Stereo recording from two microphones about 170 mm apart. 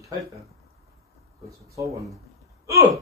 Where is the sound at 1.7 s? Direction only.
20° right (ahead or behind).